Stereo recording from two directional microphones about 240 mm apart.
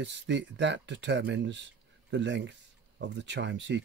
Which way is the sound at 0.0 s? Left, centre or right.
Right.